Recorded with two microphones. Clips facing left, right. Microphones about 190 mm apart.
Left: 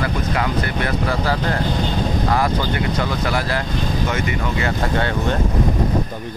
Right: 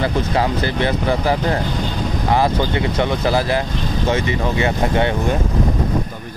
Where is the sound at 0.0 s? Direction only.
30° right (ahead or behind).